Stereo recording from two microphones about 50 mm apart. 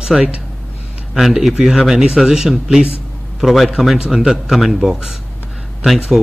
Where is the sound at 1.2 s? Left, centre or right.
Centre.